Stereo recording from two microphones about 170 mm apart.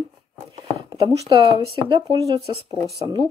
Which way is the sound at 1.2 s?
30° right (ahead or behind).